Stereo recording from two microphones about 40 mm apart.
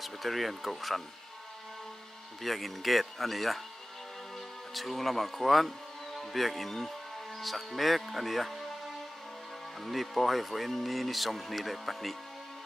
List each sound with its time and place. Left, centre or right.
0.0 s speech: centre
2.4 s speech: centre
4.7 s speech: centre
9.8 s speech: centre